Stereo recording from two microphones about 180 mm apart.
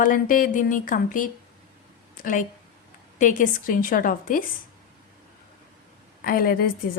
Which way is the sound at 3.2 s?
45° left (ahead or behind).